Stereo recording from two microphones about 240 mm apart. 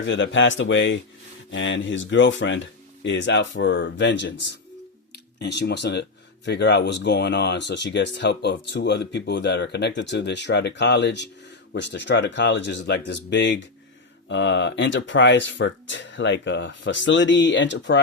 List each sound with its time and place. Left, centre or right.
0.0 s speech: left